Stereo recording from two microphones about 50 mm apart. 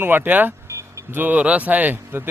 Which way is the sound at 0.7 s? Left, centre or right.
Right.